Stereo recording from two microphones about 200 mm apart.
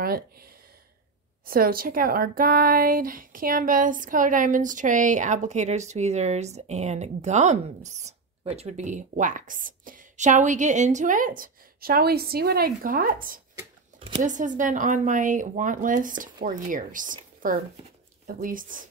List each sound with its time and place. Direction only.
0.0 s speech: 50° right (ahead or behind)